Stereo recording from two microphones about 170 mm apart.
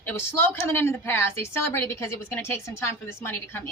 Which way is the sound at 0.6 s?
10° left (ahead or behind).